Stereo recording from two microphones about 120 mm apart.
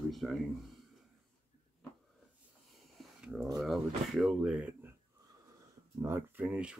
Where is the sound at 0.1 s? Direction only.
Centre (ahead or behind).